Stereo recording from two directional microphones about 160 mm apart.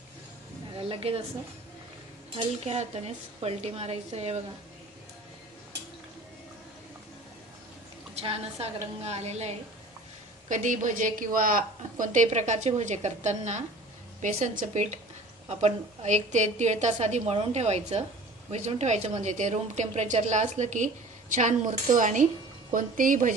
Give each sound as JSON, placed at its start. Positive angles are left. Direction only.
{"t": 0.7, "sound": "a woman's voice", "side_deg": -35}
{"t": 2.3, "sound": "a woman's voice", "side_deg": -40}
{"t": 8.1, "sound": "a woman's voice", "side_deg": -40}